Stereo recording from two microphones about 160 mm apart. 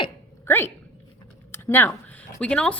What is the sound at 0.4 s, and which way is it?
A woman's voice, 15° left (ahead or behind).